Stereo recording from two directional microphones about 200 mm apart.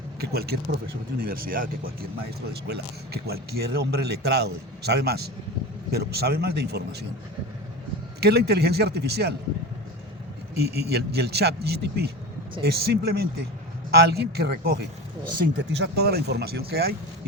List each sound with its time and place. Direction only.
0.2 s a man's voice: 50° right (ahead or behind)
8.2 s a man's voice: 55° right (ahead or behind)
10.5 s a man's voice: 55° right (ahead or behind)